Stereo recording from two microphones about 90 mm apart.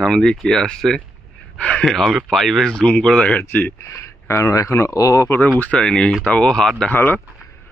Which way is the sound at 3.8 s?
30° left (ahead or behind).